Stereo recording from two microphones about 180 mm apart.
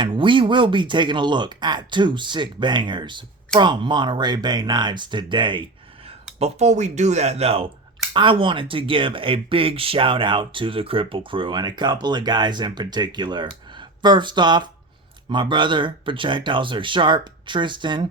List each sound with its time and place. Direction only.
0.0 s speech: 30° right (ahead or behind)